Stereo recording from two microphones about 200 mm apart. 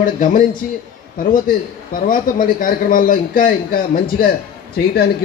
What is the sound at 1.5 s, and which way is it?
A man's voice, 40° left (ahead or behind).